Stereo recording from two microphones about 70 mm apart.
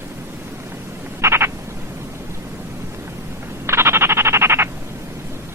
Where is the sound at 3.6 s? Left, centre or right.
Right.